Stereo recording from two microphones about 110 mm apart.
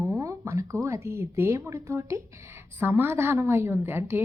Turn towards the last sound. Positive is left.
turn(degrees=-20)  # may be behind; listen again after turning